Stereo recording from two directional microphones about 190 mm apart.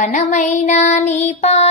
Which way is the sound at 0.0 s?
40° left (ahead or behind).